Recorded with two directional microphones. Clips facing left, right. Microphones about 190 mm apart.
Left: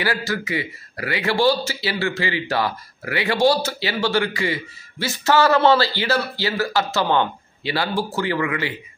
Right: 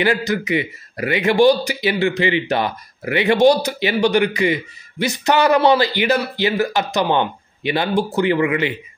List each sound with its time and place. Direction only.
0.0 s speech: 20° right (ahead or behind)